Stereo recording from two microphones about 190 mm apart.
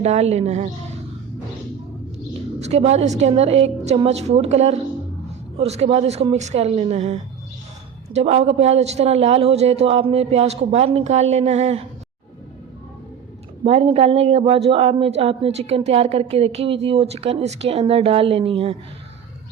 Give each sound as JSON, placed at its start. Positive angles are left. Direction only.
{"t": 0.0, "sound": "a man's voice", "side_deg": -35}
{"t": 2.6, "sound": "a man's voice", "side_deg": -35}
{"t": 13.7, "sound": "a man's voice", "side_deg": -30}